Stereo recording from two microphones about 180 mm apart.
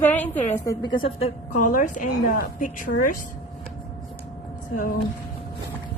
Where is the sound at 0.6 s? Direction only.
25° left (ahead or behind); by 3.2 s 50° left (ahead or behind).